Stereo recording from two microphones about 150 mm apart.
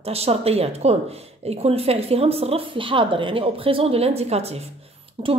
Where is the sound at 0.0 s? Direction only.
45° right (ahead or behind).